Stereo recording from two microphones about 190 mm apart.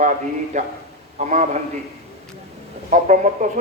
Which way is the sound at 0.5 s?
40° right (ahead or behind).